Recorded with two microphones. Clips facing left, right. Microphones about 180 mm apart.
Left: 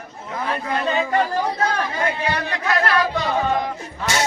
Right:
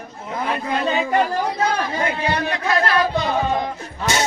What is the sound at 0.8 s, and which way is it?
Music, 20° right (ahead or behind).